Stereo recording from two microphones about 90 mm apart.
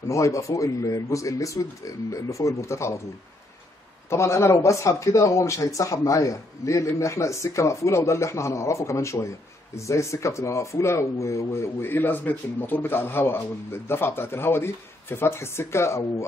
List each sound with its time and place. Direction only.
0.1 s a man's voice: 35° left (ahead or behind)
4.1 s a man's voice: 30° left (ahead or behind)